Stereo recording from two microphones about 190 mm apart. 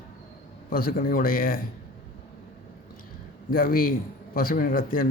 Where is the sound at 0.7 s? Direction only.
50° left (ahead or behind).